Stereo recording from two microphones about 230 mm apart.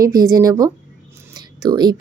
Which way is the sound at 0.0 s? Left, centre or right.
Centre.